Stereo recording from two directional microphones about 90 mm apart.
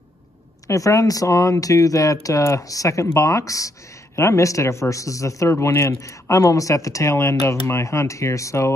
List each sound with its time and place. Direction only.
0.7 s speech: 40° left (ahead or behind)